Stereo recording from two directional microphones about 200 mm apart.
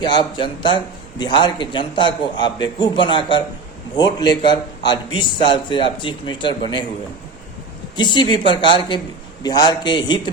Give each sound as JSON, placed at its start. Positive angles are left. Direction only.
{"t": 0.0, "sound": "a man's voice", "side_deg": 20}
{"t": 7.9, "sound": "a man's voice", "side_deg": 25}